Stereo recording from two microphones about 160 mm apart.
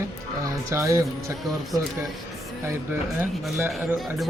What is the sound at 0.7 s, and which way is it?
Speech, 20° right (ahead or behind).